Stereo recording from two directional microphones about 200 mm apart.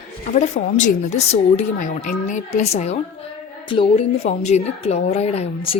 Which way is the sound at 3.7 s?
25° left (ahead or behind).